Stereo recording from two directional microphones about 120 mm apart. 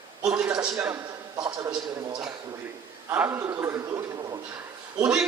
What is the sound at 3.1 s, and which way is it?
A man's voice, 20° right (ahead or behind).